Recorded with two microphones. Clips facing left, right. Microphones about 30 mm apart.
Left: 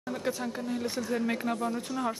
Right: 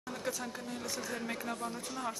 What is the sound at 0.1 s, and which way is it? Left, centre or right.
Speech, left.